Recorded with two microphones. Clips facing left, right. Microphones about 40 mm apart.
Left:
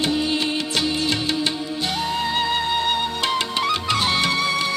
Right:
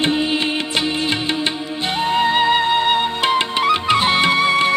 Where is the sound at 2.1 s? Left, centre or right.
Right.